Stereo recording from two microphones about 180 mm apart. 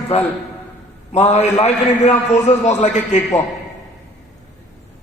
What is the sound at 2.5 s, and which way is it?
Speech, 40° left (ahead or behind).